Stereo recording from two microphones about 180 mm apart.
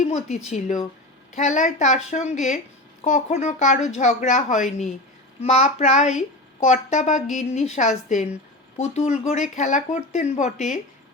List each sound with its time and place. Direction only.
0.0 s a woman's voice: 40° left (ahead or behind)